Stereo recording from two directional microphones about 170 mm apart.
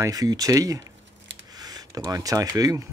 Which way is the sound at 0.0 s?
20° right (ahead or behind).